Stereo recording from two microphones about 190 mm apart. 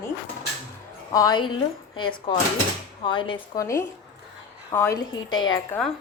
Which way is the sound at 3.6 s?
15° left (ahead or behind).